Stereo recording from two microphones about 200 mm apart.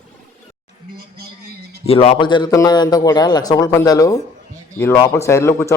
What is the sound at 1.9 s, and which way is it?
A man's voice, 30° left (ahead or behind).